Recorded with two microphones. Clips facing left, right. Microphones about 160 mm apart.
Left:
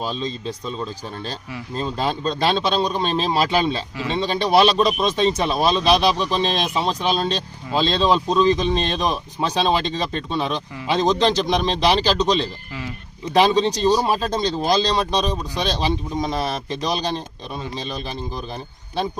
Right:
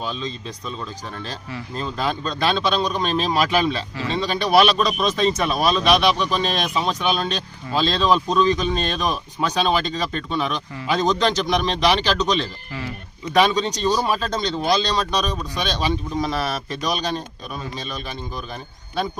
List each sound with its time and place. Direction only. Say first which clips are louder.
0.0 s a man's voice: left 3 dB; 30° left (ahead or behind)